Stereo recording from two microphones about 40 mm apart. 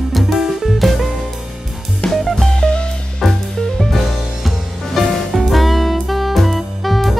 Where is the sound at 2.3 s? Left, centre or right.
Centre.